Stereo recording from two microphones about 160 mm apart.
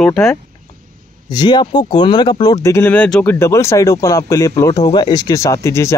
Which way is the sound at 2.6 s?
15° left (ahead or behind).